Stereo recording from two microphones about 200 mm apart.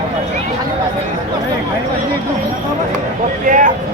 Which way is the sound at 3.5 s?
40° right (ahead or behind).